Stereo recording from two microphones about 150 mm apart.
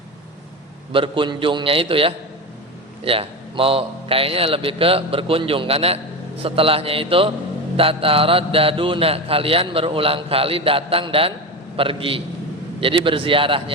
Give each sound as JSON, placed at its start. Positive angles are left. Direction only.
{"t": 0.9, "sound": "speech", "side_deg": -35}